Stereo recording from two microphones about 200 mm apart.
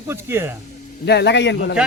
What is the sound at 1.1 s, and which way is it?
Speech, 55° left (ahead or behind).